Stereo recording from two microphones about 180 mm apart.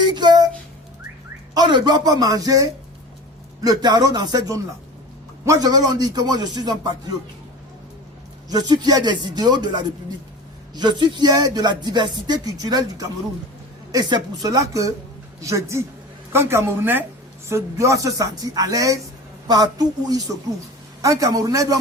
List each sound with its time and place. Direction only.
0.1 s a sound: 25° right (ahead or behind)
1.5 s speech: 25° right (ahead or behind)
8.4 s a woman's voice: 20° right (ahead or behind)